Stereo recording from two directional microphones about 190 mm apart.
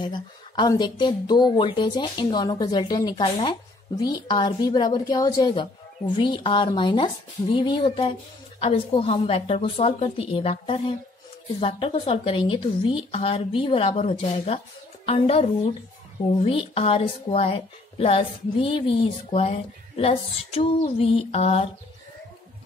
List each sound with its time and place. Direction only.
0.0 s speech: 25° left (ahead or behind)